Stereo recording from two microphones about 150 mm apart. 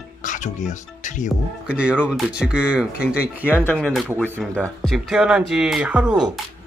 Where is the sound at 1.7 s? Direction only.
10° right (ahead or behind).